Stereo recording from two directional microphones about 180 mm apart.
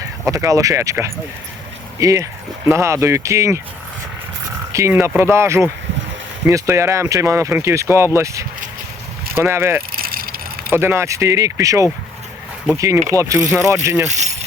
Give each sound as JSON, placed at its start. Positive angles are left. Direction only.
{"t": 0.3, "sound": "speech", "side_deg": -20}
{"t": 4.7, "sound": "speech", "side_deg": -15}
{"t": 9.9, "sound": "vehicle", "side_deg": -55}
{"t": 10.7, "sound": "speech", "side_deg": -15}
{"t": 14.1, "sound": "keys jangling", "side_deg": -40}